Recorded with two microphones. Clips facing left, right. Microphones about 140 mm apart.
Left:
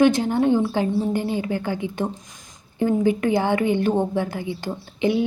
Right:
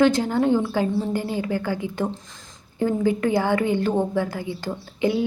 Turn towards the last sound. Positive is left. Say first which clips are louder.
# left 1 dB
turn(degrees=20)  # may be behind; listen again after turning